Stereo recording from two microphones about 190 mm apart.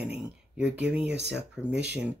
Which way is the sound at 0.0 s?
5° right (ahead or behind).